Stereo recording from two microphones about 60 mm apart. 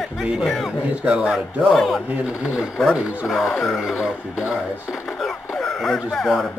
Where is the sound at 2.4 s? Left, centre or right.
Centre.